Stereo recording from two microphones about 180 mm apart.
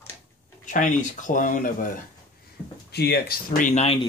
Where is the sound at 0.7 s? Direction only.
45° left (ahead or behind).